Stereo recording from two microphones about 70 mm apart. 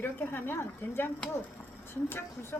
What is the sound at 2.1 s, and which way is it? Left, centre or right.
Speech, left.